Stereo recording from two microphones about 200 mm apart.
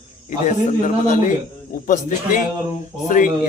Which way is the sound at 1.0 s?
40° left (ahead or behind).